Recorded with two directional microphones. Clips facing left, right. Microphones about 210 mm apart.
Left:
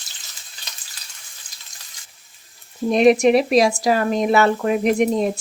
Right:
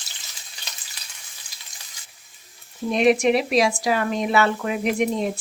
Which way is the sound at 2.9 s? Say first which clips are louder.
Left 4 dB; 40° left (ahead or behind).